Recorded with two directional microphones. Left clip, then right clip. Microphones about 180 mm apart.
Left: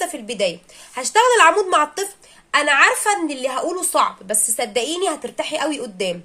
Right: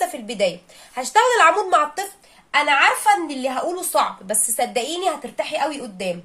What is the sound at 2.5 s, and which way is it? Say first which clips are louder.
A woman's voice: left 1 dB; 40° left (ahead or behind).